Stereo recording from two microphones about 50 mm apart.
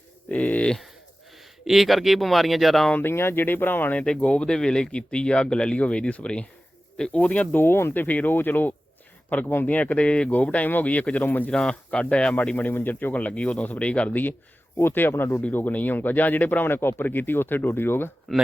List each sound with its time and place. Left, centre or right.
0.3 s livestock: left
1.4 s speech: centre
3.0 s speech: left
3.4 s speech: left
4.2 s speech: left
7.5 s speech: left
8.0 s speech: left
11.5 s speech: centre; by 13.1 s left
13.1 s speech: left
15.1 s speech: left
15.5 s speech: left
16.6 s speech: left